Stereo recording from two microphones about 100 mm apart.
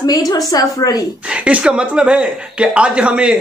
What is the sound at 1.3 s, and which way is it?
Speech, 10° right (ahead or behind).